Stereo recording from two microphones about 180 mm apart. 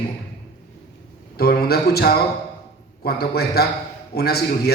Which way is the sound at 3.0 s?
60° left (ahead or behind).